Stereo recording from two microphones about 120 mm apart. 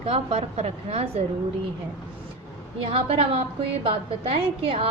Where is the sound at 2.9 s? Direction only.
55° right (ahead or behind).